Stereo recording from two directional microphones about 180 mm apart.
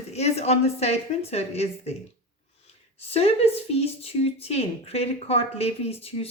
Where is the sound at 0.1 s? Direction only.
35° left (ahead or behind).